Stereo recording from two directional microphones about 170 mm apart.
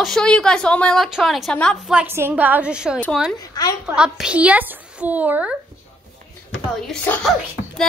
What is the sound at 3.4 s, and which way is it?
Speech, 20° left (ahead or behind).